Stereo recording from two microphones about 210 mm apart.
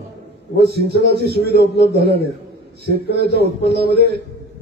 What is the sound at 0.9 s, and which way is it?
Speech, 50° right (ahead or behind).